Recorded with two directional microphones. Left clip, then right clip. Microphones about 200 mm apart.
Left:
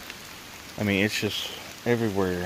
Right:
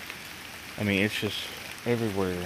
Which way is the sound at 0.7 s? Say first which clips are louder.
Left 2 dB; 15° left (ahead or behind).